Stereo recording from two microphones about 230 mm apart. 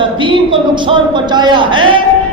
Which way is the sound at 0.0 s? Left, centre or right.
Right.